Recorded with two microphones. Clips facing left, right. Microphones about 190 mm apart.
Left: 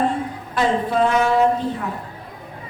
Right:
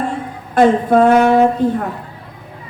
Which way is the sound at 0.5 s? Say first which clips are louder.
Right 8 dB; 50° right (ahead or behind).